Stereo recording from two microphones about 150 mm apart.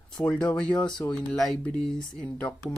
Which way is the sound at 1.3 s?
Centre (ahead or behind).